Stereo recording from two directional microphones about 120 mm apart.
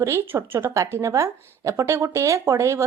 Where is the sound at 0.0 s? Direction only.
20° right (ahead or behind).